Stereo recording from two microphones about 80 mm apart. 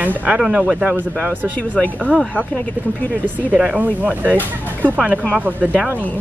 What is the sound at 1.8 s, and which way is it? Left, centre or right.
Speech, centre.